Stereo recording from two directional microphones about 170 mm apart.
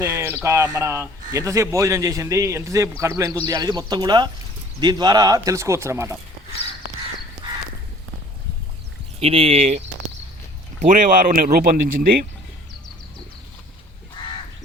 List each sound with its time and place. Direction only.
0.0 s a sound: 15° right (ahead or behind)
0.4 s a man's voice: 15° right (ahead or behind)
9.2 s speech: 35° right (ahead or behind)
10.8 s speech: 50° right (ahead or behind)